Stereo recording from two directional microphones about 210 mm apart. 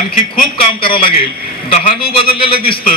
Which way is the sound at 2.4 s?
25° left (ahead or behind).